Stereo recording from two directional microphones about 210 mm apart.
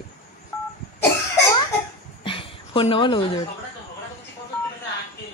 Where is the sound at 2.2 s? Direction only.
25° left (ahead or behind).